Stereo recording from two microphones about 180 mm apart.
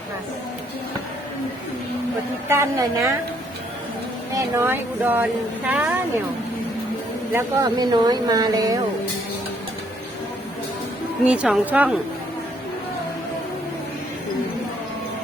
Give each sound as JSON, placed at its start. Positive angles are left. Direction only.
{"t": 2.5, "sound": "a woman's voice", "side_deg": -15}
{"t": 4.4, "sound": "a woman's voice", "side_deg": -15}
{"t": 7.3, "sound": "speech", "side_deg": -20}
{"t": 11.3, "sound": "a woman's voice", "side_deg": -5}